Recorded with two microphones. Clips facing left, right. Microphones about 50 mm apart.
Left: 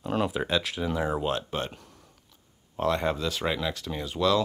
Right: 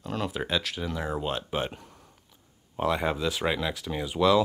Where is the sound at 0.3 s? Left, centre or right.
Centre.